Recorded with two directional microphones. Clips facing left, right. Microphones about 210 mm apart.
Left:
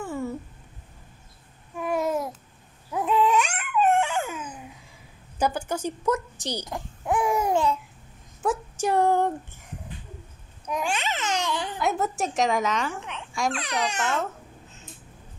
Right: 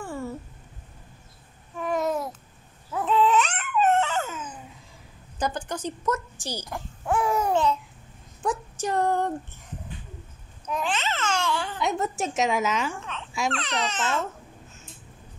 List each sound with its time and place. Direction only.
0.0 s a sound: 20° left (ahead or behind)
1.8 s babbling: 10° left (ahead or behind)
2.9 s dog: 15° left (ahead or behind)
5.4 s a child's voice: 10° left (ahead or behind)
8.4 s a sound: 10° left (ahead or behind)
10.7 s babbling: 10° left (ahead or behind)
11.8 s a woman's voice: centre (ahead or behind)
12.9 s speech: 15° left (ahead or behind)